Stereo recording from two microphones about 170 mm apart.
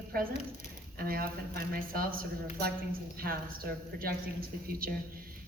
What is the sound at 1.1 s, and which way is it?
Speech, 60° right (ahead or behind).